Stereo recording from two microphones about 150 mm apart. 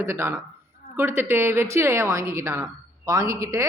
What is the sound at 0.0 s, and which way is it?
A woman's voice, 15° right (ahead or behind).